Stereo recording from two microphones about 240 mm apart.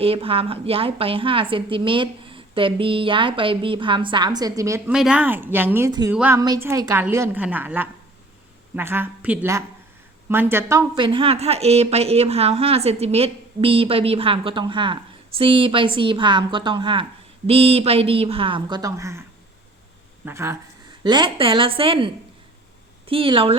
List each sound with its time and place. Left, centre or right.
0.0 s a woman's voice: right
4.9 s a woman's voice: centre
20.2 s a woman's voice: centre